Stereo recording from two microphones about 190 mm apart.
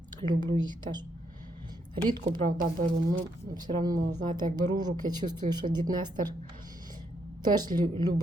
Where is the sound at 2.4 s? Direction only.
45° right (ahead or behind).